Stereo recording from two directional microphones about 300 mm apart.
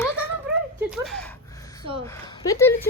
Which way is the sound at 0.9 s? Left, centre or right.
Centre.